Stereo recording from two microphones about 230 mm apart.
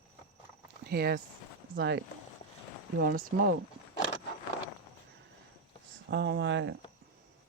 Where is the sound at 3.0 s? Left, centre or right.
Right.